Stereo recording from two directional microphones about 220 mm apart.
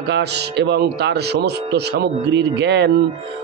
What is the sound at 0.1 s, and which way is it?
Speech, 50° right (ahead or behind).